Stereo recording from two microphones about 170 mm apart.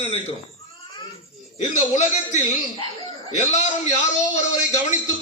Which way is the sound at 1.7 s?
45° left (ahead or behind).